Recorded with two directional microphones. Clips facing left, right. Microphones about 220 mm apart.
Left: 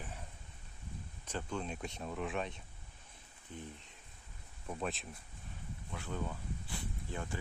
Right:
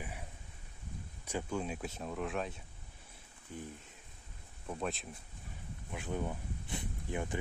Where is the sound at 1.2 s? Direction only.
10° right (ahead or behind).